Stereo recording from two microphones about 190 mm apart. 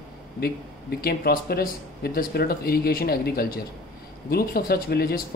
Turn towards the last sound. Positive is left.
turn(degrees=55)  # may be behind; listen again after turning